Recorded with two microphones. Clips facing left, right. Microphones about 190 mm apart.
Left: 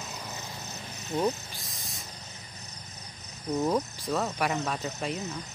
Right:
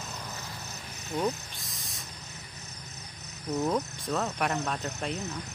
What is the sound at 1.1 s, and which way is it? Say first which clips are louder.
Speech: left 2 dB; 30° left (ahead or behind).